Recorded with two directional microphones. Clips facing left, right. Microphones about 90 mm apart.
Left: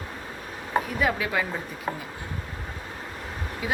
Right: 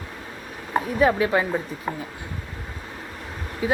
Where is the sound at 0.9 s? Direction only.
30° right (ahead or behind).